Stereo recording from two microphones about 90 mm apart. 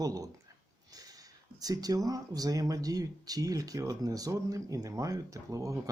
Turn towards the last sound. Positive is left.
turn(degrees=-40)  # may be behind; listen again after turning